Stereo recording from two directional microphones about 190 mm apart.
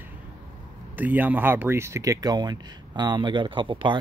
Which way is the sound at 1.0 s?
10° right (ahead or behind).